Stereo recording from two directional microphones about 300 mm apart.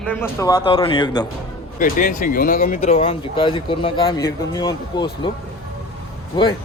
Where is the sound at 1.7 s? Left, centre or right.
Left.